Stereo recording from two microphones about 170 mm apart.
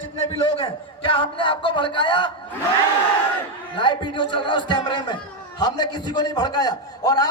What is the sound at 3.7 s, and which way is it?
A man's voice, 30° left (ahead or behind).